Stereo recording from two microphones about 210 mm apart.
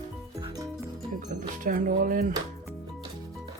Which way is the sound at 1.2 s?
35° right (ahead or behind).